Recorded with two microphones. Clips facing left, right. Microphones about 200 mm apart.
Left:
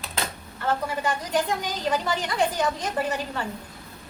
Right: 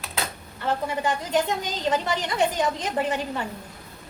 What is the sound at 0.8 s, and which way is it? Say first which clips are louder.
A woman's voice: right 1 dB; 20° right (ahead or behind).